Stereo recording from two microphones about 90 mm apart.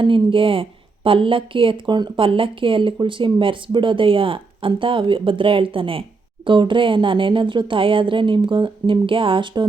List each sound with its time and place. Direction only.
0.0 s a woman's voice: 75° right (ahead or behind)